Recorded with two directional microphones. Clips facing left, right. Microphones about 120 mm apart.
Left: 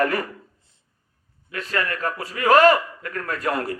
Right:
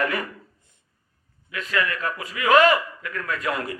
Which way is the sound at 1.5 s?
40° left (ahead or behind).